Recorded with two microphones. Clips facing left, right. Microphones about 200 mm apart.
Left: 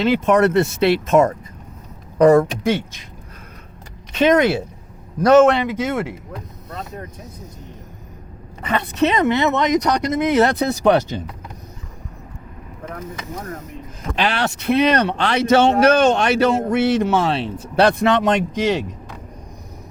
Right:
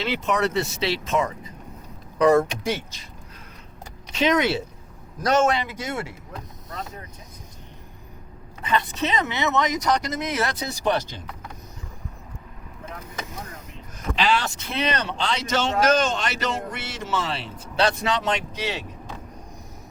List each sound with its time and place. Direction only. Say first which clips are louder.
0.0 s speech: left 9 dB; 50° left (ahead or behind)
4.1 s speech: left 6 dB; 55° left (ahead or behind)
8.6 s speech: left 6 dB; 60° left (ahead or behind)
14.2 s speech: left 3 dB; 65° left (ahead or behind)